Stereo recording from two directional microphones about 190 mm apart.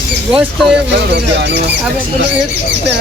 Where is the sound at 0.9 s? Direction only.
65° right (ahead or behind).